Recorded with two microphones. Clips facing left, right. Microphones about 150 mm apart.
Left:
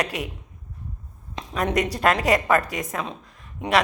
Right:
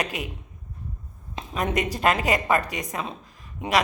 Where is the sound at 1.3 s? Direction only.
5° right (ahead or behind).